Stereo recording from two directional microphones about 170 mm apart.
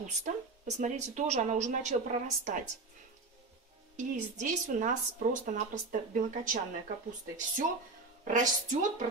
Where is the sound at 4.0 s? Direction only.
50° right (ahead or behind).